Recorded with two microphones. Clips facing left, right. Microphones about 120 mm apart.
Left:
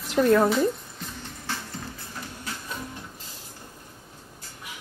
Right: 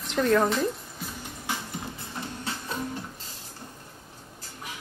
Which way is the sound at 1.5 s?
15° right (ahead or behind).